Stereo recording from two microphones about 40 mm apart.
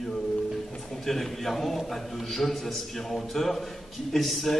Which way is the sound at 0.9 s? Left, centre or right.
Centre.